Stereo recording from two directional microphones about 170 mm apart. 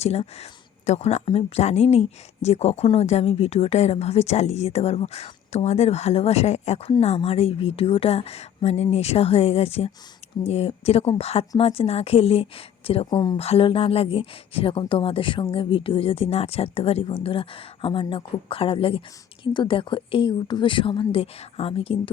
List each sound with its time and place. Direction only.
0.0 s speech: 40° left (ahead or behind)